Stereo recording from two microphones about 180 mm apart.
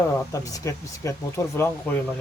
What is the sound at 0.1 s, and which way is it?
Speech, 15° left (ahead or behind).